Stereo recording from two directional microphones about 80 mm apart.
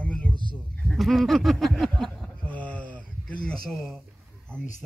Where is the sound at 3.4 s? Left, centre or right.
Centre.